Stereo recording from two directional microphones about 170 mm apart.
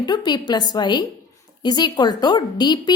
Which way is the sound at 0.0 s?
25° left (ahead or behind).